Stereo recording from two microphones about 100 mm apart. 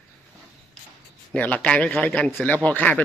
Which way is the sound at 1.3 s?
15° left (ahead or behind).